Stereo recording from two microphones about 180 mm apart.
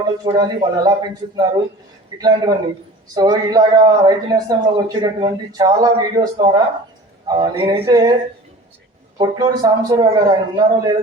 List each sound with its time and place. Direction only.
0.3 s a man's voice: 20° right (ahead or behind)
9.1 s a man's voice: 25° right (ahead or behind)